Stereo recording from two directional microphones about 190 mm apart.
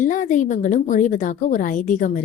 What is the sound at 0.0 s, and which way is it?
A woman's voice, 45° left (ahead or behind).